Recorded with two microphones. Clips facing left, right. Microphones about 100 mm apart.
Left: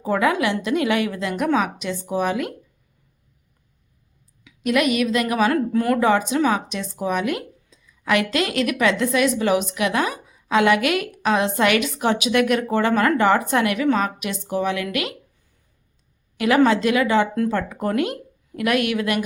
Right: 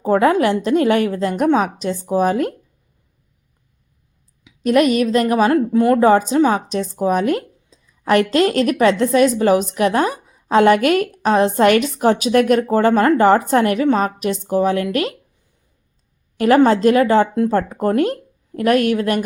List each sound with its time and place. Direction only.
0.0 s speech: 40° right (ahead or behind)
4.6 s speech: 40° right (ahead or behind)
5.5 s speech: 25° right (ahead or behind)
16.4 s speech: 40° right (ahead or behind)